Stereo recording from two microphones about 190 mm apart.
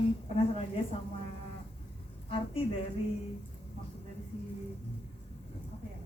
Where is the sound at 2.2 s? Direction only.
30° left (ahead or behind).